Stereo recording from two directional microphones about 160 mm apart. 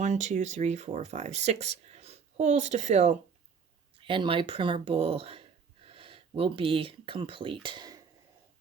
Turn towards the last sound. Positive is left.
turn(degrees=-25)  # may be behind; listen again after turning